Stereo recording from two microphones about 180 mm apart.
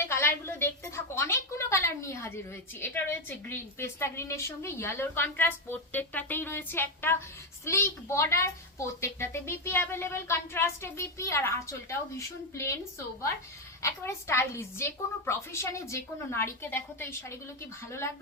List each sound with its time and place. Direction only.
0.0 s a woman's voice: 15° left (ahead or behind)
13.8 s a woman's voice: 15° left (ahead or behind)